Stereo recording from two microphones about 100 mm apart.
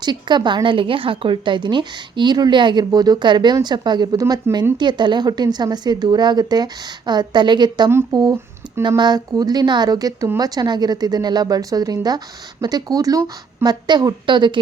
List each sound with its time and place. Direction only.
0.0 s a woman's voice: 50° right (ahead or behind)
8.1 s a woman's voice: 35° right (ahead or behind); by 14.6 s 50° right (ahead or behind)